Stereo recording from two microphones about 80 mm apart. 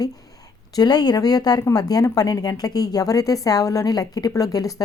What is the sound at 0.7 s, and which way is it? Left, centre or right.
Speech, left.